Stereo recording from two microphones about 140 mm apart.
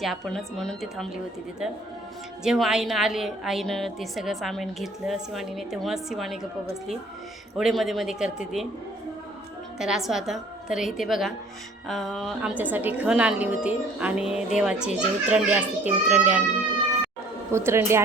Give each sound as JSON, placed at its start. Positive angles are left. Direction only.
{"t": 0.0, "sound": "a woman's voice", "side_deg": 0}
{"t": 9.7, "sound": "a woman's voice", "side_deg": -5}
{"t": 17.5, "sound": "speech", "side_deg": -20}